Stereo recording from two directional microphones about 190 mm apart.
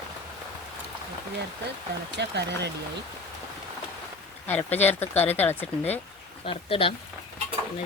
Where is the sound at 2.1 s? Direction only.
65° right (ahead or behind).